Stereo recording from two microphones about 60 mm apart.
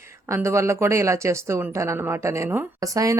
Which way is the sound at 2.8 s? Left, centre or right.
Right.